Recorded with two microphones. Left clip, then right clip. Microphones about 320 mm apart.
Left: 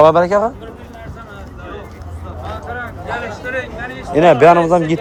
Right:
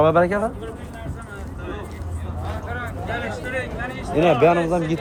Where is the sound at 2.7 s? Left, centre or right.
Left.